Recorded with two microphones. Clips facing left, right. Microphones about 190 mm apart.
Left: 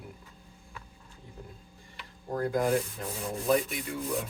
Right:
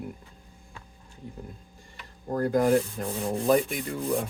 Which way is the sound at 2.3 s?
50° right (ahead or behind).